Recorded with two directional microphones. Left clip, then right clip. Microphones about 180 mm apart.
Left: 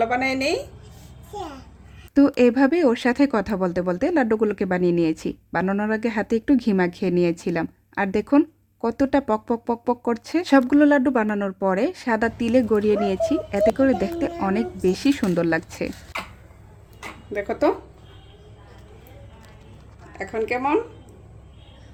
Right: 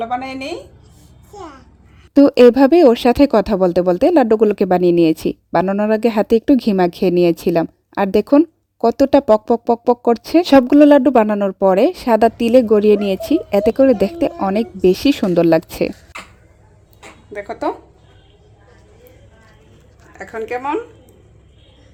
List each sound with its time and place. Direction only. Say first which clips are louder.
0.0 s a woman's voice: left 1 dB; 45° left (ahead or behind)
2.1 s speech: right 9 dB; 35° right (ahead or behind)
17.3 s a woman's voice: left 1 dB; 25° left (ahead or behind)
20.1 s a woman's voice: right 1 dB; 20° left (ahead or behind)